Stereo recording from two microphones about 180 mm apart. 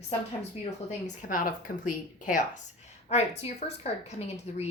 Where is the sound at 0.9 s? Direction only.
45° left (ahead or behind).